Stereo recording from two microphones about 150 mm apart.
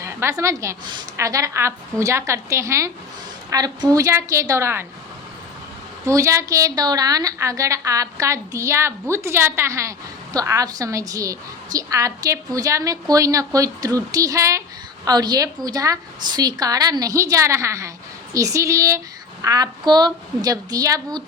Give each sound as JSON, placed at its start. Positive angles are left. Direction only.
{"t": 0.0, "sound": "a woman's voice", "side_deg": -20}
{"t": 6.1, "sound": "a woman's voice", "side_deg": -20}